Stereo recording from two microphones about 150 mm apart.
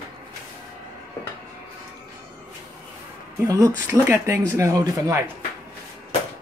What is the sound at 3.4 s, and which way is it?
Speech, 20° right (ahead or behind).